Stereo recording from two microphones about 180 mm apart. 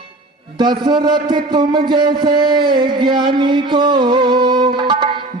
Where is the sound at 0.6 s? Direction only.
25° right (ahead or behind).